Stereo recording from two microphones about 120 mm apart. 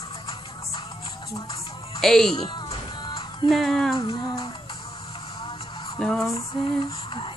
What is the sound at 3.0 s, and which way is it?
Music, 35° left (ahead or behind).